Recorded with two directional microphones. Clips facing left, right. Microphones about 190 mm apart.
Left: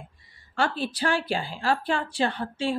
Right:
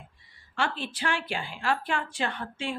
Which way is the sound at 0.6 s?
40° left (ahead or behind).